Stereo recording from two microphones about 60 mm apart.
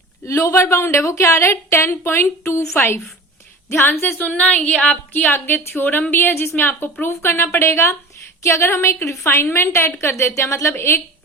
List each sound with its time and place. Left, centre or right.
0.3 s a woman's voice: left
4.4 s a sound: left
5.1 s a woman's voice: left